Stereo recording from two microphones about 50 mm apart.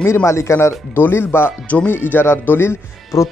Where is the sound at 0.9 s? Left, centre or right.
Left.